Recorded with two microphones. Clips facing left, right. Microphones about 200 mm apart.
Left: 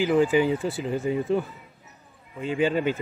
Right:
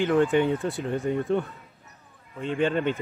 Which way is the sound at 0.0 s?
Centre (ahead or behind).